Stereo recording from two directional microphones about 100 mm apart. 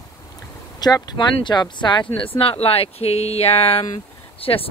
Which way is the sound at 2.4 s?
75° left (ahead or behind).